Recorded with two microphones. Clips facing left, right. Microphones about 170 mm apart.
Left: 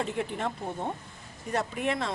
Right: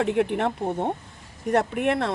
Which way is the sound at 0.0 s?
65° right (ahead or behind).